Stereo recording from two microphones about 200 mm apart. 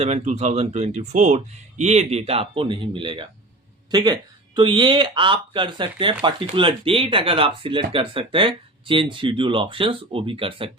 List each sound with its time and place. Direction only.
0.0 s speech: 35° right (ahead or behind)